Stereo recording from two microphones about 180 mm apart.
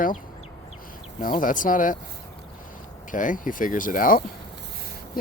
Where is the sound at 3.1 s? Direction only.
45° left (ahead or behind).